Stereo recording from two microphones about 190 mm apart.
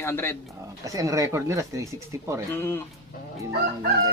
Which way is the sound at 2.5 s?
10° left (ahead or behind).